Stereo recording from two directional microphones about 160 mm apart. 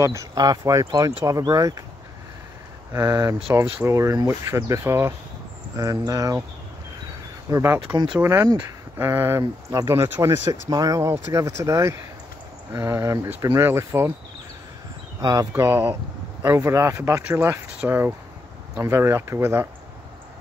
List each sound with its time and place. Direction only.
0.0 s speech: 20° right (ahead or behind)
2.9 s speech: 20° right (ahead or behind)
7.5 s speech: 15° right (ahead or behind)
15.1 s speech: 20° right (ahead or behind)